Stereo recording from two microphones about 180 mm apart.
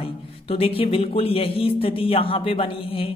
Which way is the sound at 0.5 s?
30° left (ahead or behind).